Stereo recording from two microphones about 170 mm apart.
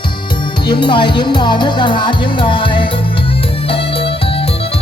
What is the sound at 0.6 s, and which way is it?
Speech, 25° left (ahead or behind).